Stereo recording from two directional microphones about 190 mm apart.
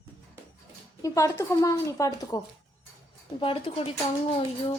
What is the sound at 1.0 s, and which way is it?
Speech, 15° left (ahead or behind).